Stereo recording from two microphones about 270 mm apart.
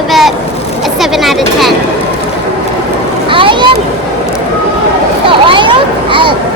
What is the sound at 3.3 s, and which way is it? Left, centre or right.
Vehicle, centre.